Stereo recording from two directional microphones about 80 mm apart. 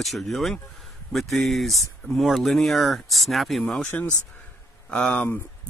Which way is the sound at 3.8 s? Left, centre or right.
Left.